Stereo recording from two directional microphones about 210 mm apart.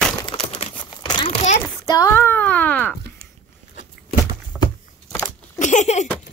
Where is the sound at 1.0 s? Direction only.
25° left (ahead or behind).